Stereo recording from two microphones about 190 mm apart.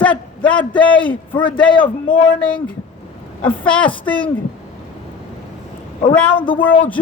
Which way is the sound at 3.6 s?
5° left (ahead or behind).